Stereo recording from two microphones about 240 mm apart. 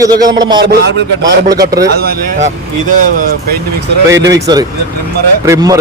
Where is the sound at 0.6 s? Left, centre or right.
Right.